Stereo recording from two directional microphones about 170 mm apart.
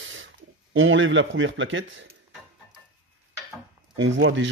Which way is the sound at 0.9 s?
90° right.